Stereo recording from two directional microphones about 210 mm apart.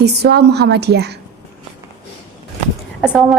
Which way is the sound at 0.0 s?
50° right (ahead or behind).